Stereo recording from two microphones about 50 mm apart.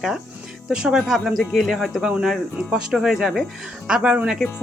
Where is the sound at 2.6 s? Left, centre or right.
Centre.